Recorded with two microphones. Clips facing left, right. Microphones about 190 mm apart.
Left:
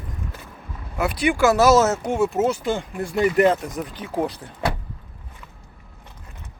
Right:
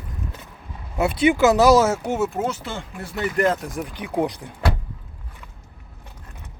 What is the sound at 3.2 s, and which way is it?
Speech, 5° left (ahead or behind).